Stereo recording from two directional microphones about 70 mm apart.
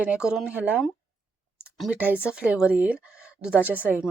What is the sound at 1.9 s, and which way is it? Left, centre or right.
Speech, right.